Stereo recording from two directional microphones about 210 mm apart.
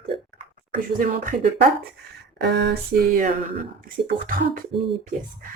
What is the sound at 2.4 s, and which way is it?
Speech, 55° right (ahead or behind).